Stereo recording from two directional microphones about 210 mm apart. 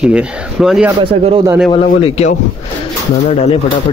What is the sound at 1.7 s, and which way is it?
Speech, 25° left (ahead or behind).